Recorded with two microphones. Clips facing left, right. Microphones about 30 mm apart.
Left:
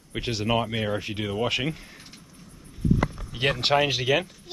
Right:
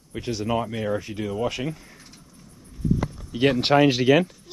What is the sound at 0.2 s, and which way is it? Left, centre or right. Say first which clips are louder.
Speech: even; left.